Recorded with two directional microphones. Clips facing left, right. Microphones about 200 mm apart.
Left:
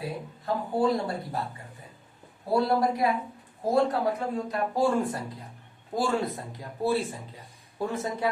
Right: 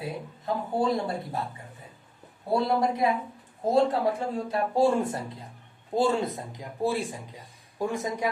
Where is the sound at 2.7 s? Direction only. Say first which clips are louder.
Even; 20° right (ahead or behind).